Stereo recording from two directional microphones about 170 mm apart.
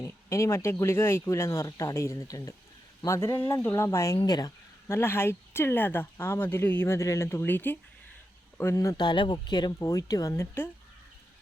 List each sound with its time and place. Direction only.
0.0 s speech: 20° left (ahead or behind)